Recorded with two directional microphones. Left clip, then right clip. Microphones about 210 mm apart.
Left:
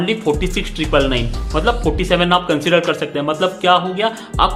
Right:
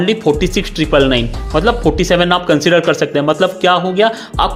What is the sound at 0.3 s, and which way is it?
A man's voice, 30° right (ahead or behind).